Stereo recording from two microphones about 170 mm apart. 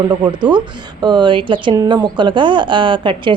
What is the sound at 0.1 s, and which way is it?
A woman's voice, 25° right (ahead or behind).